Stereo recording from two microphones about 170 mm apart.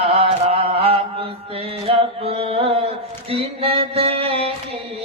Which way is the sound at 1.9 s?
35° right (ahead or behind).